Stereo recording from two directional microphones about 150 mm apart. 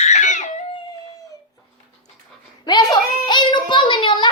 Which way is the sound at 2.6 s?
30° left (ahead or behind).